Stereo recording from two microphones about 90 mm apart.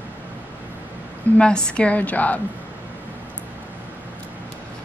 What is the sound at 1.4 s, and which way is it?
A woman's voice, 10° left (ahead or behind).